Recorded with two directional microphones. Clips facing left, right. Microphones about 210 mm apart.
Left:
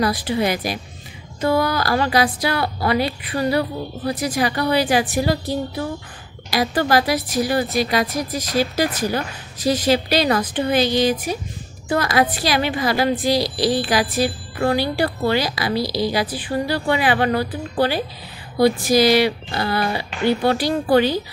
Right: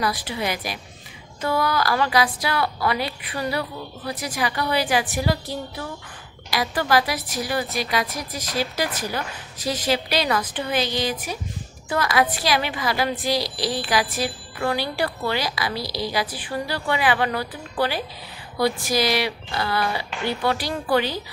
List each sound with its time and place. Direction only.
0.0 s a woman's voice: 40° left (ahead or behind)